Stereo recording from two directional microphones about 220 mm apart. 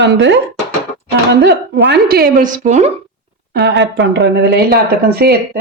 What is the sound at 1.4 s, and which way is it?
Speech, 50° right (ahead or behind).